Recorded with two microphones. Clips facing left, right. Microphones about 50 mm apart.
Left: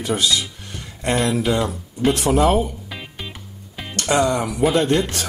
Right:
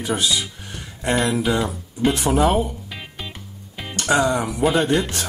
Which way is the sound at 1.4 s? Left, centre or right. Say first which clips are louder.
Left 1 dB; centre.